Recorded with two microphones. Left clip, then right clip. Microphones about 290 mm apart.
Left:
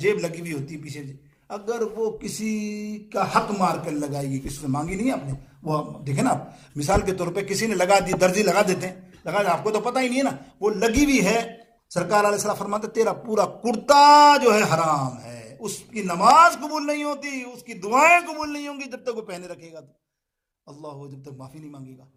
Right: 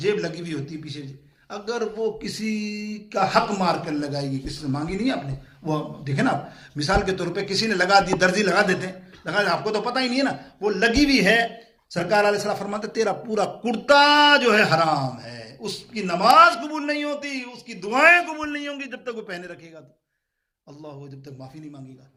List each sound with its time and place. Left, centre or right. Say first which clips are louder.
0.0 s a man's voice: left 1 dB; centre
20.8 s a man's voice: left 2 dB; centre